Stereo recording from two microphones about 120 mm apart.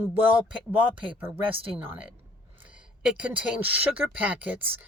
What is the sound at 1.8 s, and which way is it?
Speech, 15° right (ahead or behind).